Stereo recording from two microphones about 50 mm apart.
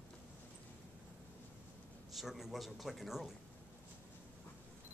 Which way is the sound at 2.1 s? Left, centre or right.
Centre.